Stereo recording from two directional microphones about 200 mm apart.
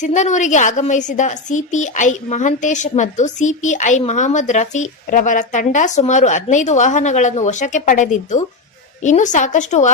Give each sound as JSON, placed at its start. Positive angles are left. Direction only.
{"t": 0.0, "sound": "a woman's voice", "side_deg": 35}